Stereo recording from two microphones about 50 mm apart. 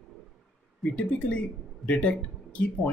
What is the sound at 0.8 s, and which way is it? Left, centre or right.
Speech, centre.